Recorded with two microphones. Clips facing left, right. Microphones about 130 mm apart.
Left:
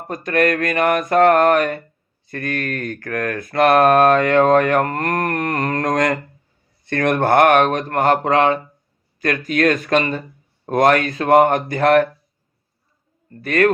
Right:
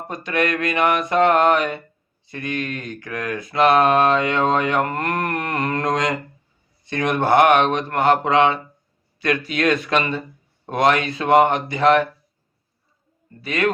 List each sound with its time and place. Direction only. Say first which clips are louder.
0.1 s speech: left 4 dB; 45° left (ahead or behind)
13.4 s speech: left 6 dB; 55° left (ahead or behind)